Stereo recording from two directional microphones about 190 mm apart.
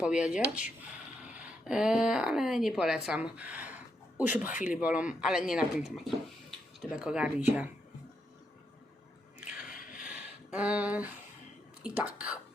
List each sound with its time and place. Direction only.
0.0 s speech: 5° right (ahead or behind)
4.5 s speech: 45° left (ahead or behind)
4.8 s speech: 5° right (ahead or behind)
9.4 s music: 45° left (ahead or behind)
10.0 s a sound: 5° right (ahead or behind)
11.8 s speech: 5° right (ahead or behind)